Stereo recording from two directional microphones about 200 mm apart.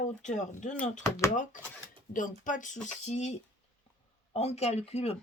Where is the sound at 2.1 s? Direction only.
40° left (ahead or behind).